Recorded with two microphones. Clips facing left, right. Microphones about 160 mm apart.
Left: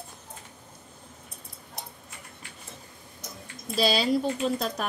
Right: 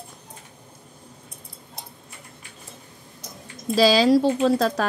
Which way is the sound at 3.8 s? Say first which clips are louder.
Right 8 dB; 90° right.